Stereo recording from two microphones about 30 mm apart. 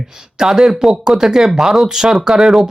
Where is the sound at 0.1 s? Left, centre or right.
Centre.